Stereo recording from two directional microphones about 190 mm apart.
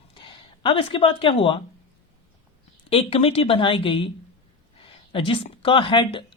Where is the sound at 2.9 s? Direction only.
30° left (ahead or behind).